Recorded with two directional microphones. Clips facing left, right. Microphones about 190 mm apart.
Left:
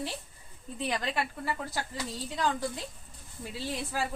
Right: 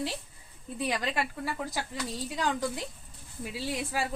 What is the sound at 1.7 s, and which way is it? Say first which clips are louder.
A woman's voice: right 1 dB; 15° right (ahead or behind).